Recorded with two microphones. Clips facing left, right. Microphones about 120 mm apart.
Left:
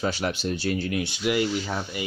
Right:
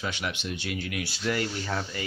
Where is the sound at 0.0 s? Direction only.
35° left (ahead or behind).